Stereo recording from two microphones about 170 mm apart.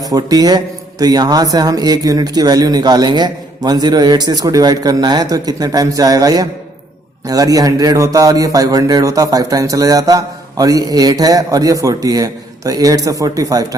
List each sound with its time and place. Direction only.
0.1 s speech: 20° right (ahead or behind)